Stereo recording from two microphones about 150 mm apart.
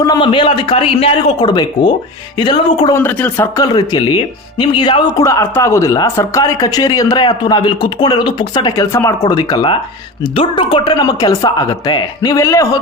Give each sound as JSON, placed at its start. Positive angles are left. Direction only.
{"t": 0.0, "sound": "a man's voice", "side_deg": 30}
{"t": 2.9, "sound": "speech", "side_deg": 10}
{"t": 3.6, "sound": "speech", "side_deg": 25}